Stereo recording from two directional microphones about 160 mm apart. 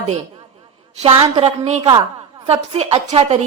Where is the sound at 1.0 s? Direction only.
40° right (ahead or behind).